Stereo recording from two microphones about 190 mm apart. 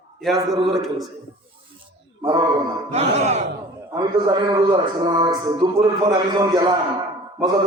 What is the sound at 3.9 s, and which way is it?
A man's voice, 20° right (ahead or behind).